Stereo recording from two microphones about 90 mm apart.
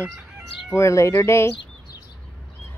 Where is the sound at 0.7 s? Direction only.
35° left (ahead or behind).